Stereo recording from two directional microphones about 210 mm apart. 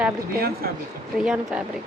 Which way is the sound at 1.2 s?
5° right (ahead or behind).